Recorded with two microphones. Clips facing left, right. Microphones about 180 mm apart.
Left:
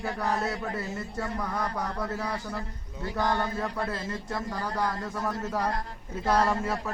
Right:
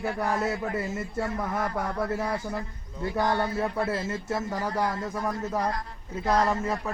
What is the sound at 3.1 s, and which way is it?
Speech, 20° right (ahead or behind).